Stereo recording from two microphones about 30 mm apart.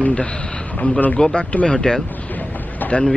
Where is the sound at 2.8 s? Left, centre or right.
Left.